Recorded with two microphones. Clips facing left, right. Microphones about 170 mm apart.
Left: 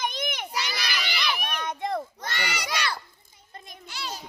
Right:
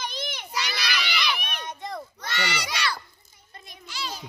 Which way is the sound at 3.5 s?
45° left (ahead or behind).